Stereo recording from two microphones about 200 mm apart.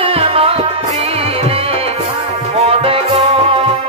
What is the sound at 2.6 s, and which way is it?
Music, 30° right (ahead or behind).